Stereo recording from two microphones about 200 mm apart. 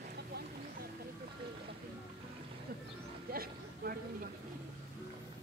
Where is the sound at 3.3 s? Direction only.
50° right (ahead or behind).